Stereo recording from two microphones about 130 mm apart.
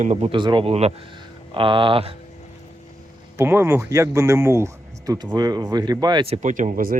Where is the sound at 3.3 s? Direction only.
20° right (ahead or behind); by 6.2 s 35° right (ahead or behind).